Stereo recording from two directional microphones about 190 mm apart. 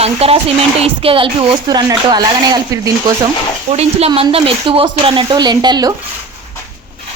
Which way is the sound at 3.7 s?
35° right (ahead or behind).